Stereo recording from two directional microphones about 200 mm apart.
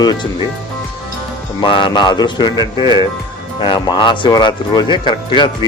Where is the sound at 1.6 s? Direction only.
25° left (ahead or behind).